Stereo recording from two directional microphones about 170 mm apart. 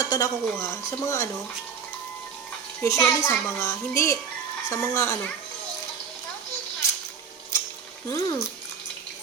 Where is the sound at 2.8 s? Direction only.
15° left (ahead or behind).